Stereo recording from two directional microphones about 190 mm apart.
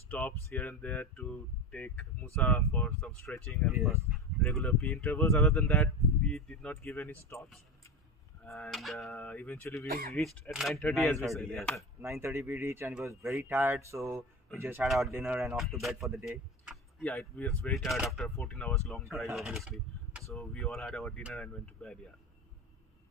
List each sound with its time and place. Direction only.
0.1 s speech: 10° left (ahead or behind)
5.4 s speech: centre (ahead or behind)
9.8 s speech: 50° right (ahead or behind)
10.1 s speech: centre (ahead or behind)
12.0 s speech: 15° right (ahead or behind); by 22.1 s 5° left (ahead or behind)